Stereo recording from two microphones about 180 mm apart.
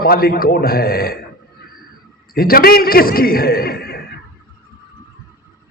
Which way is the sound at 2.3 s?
55° left (ahead or behind).